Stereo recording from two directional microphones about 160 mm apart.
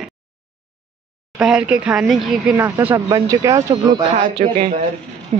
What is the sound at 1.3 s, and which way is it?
A man's voice, 5° right (ahead or behind).